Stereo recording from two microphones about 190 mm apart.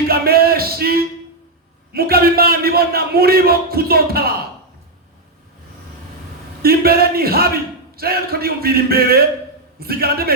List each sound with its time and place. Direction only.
0.1 s a sound: 55° right (ahead or behind)
1.9 s a man's voice: 55° right (ahead or behind)
6.6 s a man's voice: 55° right (ahead or behind)